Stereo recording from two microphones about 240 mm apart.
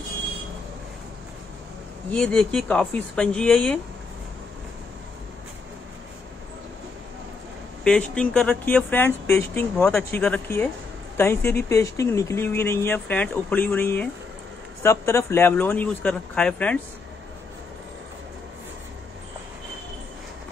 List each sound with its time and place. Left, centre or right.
2.0 s speech: centre
7.8 s speech: centre